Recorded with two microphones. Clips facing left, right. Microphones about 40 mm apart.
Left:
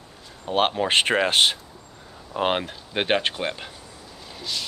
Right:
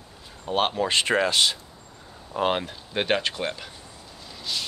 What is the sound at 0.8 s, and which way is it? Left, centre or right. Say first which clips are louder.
Speech: left 2 dB; left.